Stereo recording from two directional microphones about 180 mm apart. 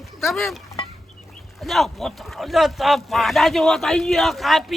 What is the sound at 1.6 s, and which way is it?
Speech, centre (ahead or behind).